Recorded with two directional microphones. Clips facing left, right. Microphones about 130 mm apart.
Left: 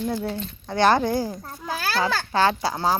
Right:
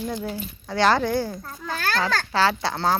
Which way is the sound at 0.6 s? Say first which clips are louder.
Left 1 dB; 20° left (ahead or behind).